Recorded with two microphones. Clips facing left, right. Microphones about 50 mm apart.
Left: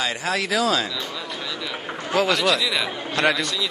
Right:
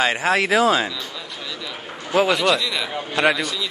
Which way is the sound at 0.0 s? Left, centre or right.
Right.